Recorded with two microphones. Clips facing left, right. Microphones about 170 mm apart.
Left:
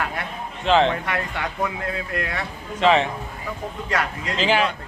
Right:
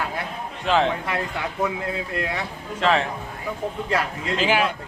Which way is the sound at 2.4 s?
Centre (ahead or behind).